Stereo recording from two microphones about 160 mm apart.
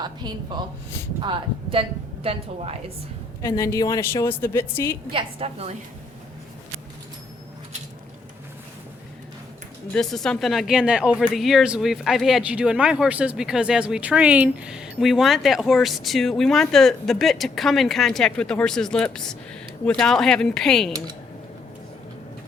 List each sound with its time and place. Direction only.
0.0 s speech: 25° right (ahead or behind)
3.4 s a woman's voice: 20° left (ahead or behind)
5.1 s speech: 35° right (ahead or behind)
9.9 s speech: centre (ahead or behind)